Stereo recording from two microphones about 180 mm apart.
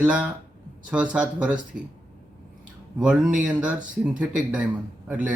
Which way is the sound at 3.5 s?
5° right (ahead or behind).